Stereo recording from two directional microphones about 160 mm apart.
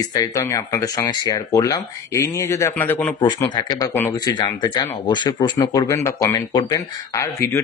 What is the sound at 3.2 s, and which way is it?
Speech, 25° left (ahead or behind).